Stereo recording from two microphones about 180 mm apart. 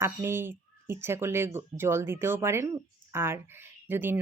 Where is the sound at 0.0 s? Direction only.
15° right (ahead or behind).